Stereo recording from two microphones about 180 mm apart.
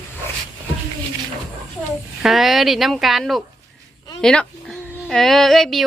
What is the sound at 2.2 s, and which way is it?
Speech, centre (ahead or behind).